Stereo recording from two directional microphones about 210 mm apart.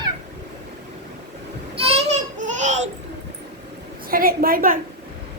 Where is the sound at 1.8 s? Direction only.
30° right (ahead or behind).